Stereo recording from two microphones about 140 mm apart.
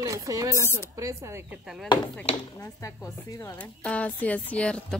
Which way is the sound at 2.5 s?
20° left (ahead or behind).